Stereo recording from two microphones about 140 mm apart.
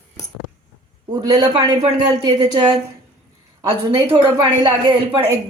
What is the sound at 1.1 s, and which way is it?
A woman's voice, 30° right (ahead or behind).